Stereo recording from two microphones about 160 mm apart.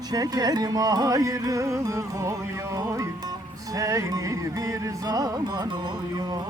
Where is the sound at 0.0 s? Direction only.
25° right (ahead or behind).